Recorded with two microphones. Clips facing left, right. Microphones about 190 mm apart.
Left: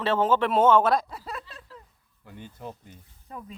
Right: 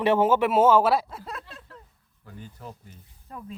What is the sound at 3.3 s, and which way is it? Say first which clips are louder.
Speech: even; centre (ahead or behind).